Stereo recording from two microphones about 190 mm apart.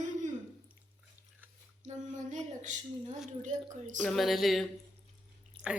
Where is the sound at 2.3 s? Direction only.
40° right (ahead or behind).